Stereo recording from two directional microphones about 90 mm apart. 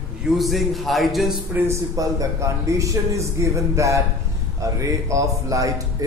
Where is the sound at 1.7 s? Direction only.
40° right (ahead or behind).